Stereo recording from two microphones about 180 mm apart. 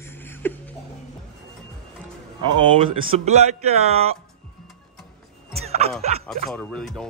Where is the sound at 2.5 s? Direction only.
30° right (ahead or behind).